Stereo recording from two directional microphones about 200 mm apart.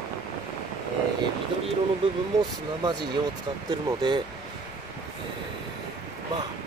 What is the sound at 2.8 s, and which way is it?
Speech, 20° right (ahead or behind).